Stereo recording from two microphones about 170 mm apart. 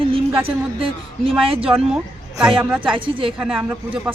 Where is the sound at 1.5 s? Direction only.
35° right (ahead or behind).